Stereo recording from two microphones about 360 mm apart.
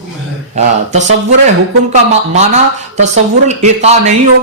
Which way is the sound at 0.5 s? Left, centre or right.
Centre.